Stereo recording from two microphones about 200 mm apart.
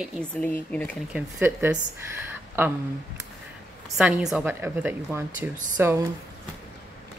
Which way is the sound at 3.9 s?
5° right (ahead or behind).